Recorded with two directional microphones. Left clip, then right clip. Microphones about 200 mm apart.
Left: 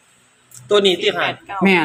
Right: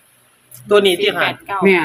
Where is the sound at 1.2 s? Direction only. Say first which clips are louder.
Right 3 dB; 50° right (ahead or behind).